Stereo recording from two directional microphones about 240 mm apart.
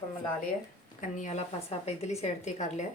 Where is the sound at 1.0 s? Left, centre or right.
Left.